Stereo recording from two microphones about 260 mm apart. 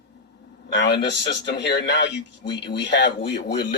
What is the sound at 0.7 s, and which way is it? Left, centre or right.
A man's voice, left.